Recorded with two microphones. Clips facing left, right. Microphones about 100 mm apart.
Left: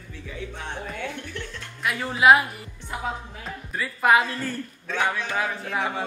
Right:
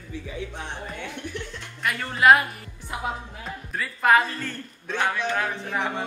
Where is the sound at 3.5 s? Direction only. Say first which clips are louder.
Left 1 dB; centre (ahead or behind).